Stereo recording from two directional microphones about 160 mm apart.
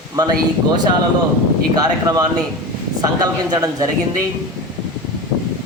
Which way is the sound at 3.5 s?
25° right (ahead or behind).